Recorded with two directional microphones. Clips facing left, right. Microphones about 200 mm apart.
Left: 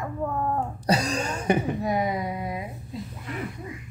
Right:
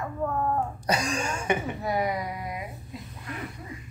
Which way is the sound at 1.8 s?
20° left (ahead or behind).